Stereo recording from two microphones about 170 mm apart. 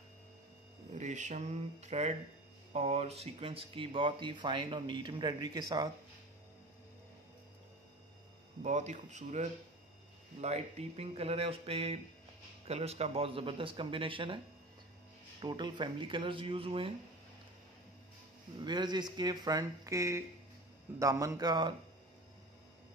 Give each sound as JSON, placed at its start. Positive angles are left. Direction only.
{"t": 0.9, "sound": "speech", "side_deg": -45}
{"t": 8.6, "sound": "speech", "side_deg": -45}
{"t": 15.4, "sound": "speech", "side_deg": -25}
{"t": 18.6, "sound": "speech", "side_deg": -25}